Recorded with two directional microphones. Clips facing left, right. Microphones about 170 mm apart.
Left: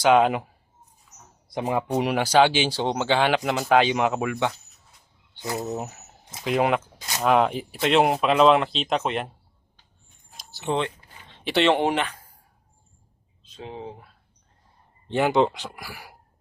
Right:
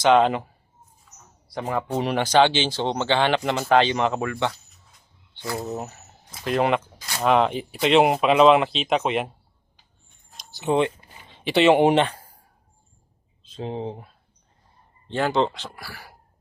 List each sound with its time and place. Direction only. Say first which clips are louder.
0.0 s speech: right 1 dB; 5° left (ahead or behind)
1.5 s speech: left 1 dB; 15° left (ahead or behind); by 9.3 s centre (ahead or behind)
10.3 s a sound: right 4 dB; centre (ahead or behind)
10.8 s a sound: right 5 dB; 10° right (ahead or behind)
11.9 s speech: right 6 dB; 30° right (ahead or behind)
13.4 s speech: right 6 dB; 30° right (ahead or behind)
15.1 s speech: left 2 dB; 15° left (ahead or behind)